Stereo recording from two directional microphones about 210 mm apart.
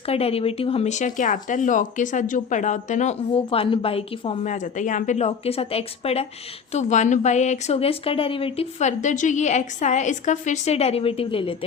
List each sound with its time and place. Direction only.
0.0 s speech: 30° left (ahead or behind)